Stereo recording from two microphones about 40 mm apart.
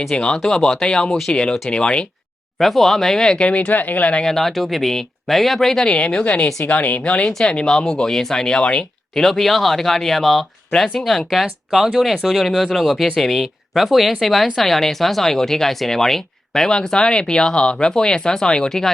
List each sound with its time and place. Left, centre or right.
0.2 s speech: centre
2.6 s speech: centre
3.3 s speech: left
3.7 s speech: left
4.3 s speech: centre
5.9 s speech: left
7.0 s speech: left; by 11.3 s centre
11.3 s speech: centre
16.6 s speech: centre